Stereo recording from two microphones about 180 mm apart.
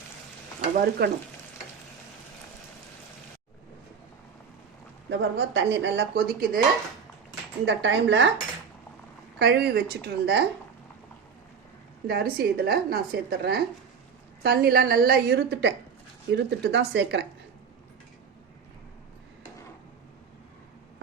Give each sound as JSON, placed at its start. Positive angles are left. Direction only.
{"t": 0.8, "sound": "a woman's voice", "side_deg": -60}
{"t": 5.0, "sound": "speech", "side_deg": -75}
{"t": 7.6, "sound": "speech", "side_deg": -80}
{"t": 9.4, "sound": "speech", "side_deg": -65}
{"t": 12.0, "sound": "a woman's voice", "side_deg": -60}